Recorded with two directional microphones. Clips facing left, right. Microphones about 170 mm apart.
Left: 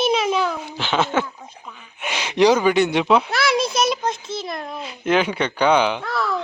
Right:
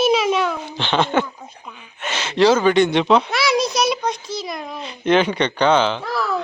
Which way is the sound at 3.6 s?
30° left (ahead or behind).